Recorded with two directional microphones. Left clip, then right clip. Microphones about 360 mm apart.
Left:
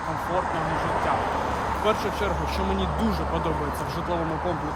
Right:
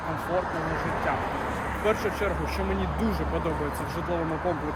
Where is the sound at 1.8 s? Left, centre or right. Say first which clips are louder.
Even; centre.